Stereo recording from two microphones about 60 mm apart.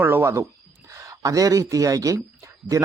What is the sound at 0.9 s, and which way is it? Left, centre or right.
Speech, right.